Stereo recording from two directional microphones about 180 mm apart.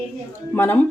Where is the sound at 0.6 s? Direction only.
10° left (ahead or behind).